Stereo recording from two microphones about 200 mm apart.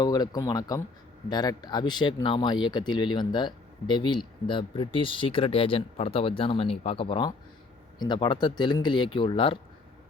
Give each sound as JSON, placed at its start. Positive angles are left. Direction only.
{"t": 0.0, "sound": "speech", "side_deg": 20}